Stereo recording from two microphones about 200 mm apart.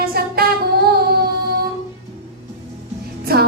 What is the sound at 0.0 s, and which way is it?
Music, 50° right (ahead or behind).